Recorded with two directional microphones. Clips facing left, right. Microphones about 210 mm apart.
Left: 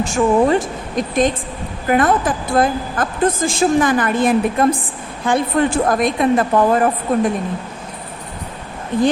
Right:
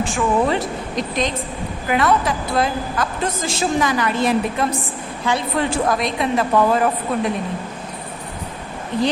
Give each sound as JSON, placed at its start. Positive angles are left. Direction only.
{"t": 0.0, "sound": "a woman's voice", "side_deg": 45}
{"t": 8.9, "sound": "a woman's voice", "side_deg": 50}